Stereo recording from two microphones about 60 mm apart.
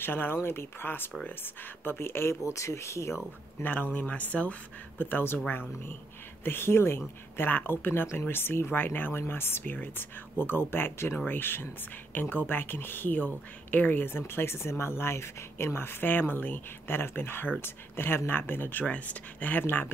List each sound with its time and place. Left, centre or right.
0.0 s speech: left
3.6 s speech: left